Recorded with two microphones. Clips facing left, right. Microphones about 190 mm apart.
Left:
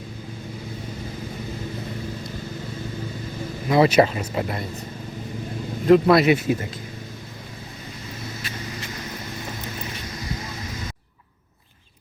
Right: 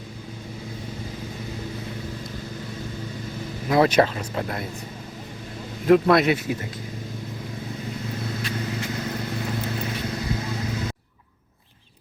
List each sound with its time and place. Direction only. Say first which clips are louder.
3.7 s speech: left 2 dB; 5° left (ahead or behind)
5.8 s speech: left 2 dB; centre (ahead or behind)
6.2 s speech: left 4 dB; 25° left (ahead or behind)